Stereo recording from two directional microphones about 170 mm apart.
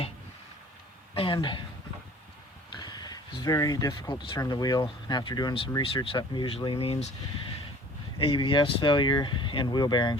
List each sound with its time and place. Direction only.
1.1 s speech: 30° left (ahead or behind)
2.7 s a sound: 25° left (ahead or behind)
4.4 s speech: 25° left (ahead or behind)
8.2 s speech: 30° left (ahead or behind)